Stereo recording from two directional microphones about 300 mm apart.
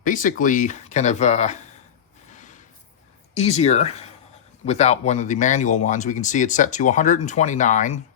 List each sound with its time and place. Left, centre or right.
0.0 s speech: left
2.3 s a sound: left
3.3 s speech: left